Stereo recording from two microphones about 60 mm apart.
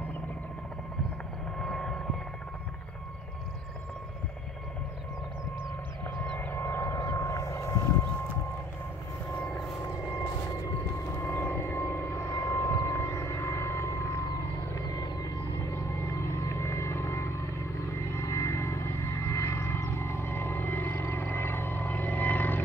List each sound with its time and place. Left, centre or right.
1.6 s vehicle: centre
6.5 s vehicle: left
10.0 s vehicle: left
11.1 s vehicle: left
14.8 s music: left
15.5 s music: left
19.9 s whale vocalization: left